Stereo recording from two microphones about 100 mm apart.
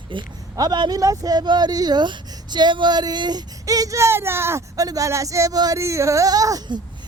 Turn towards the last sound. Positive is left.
turn(degrees=-40)  # may be behind; listen again after turning